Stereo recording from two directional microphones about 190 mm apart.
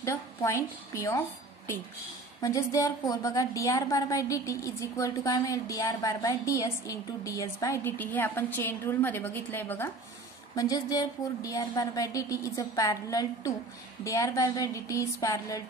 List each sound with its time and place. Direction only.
0.0 s a woman's voice: 15° left (ahead or behind)
2.4 s a woman's voice: 15° left (ahead or behind)